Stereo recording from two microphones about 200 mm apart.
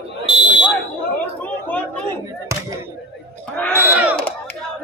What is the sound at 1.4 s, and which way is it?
Chatter, 5° left (ahead or behind).